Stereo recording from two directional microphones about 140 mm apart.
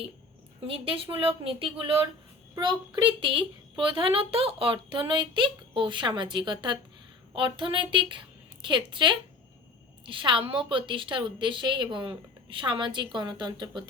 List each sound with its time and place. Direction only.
0.7 s a woman's voice: 40° right (ahead or behind)